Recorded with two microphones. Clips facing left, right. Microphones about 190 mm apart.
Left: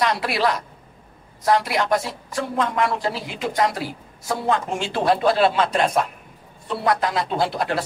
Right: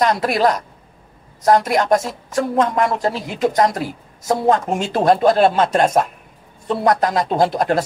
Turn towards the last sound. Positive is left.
turn(degrees=-45)  # may be behind; listen again after turning